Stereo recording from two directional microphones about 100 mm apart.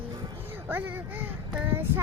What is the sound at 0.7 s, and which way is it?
Speech, 15° right (ahead or behind).